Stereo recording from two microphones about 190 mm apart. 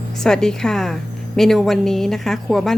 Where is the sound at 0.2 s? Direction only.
5° left (ahead or behind).